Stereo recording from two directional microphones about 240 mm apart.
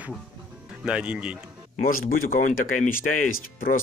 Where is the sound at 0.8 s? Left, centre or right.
Centre.